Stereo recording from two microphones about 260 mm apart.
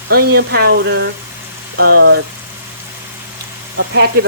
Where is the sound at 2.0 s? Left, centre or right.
Right.